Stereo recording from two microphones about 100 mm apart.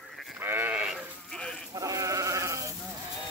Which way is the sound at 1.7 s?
35° right (ahead or behind).